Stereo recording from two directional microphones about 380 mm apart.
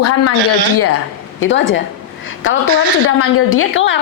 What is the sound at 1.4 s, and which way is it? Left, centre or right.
Speech, left.